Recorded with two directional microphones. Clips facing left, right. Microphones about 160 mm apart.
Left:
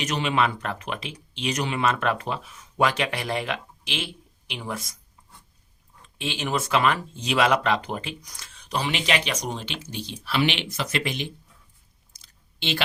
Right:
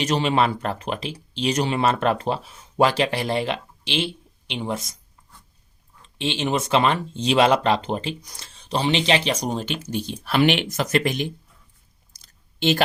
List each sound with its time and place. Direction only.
0.0 s speech: 30° right (ahead or behind)
6.1 s speech: 30° right (ahead or behind)
9.5 s speech: 45° right (ahead or behind)
12.2 s a sound: 45° right (ahead or behind)